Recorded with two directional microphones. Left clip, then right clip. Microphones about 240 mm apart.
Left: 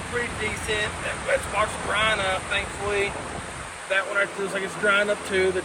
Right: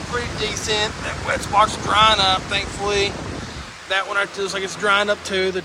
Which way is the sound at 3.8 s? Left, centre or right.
Centre.